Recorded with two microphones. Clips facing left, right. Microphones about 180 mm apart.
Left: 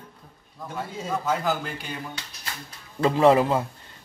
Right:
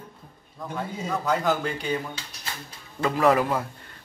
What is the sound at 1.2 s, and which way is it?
Speech, 5° left (ahead or behind).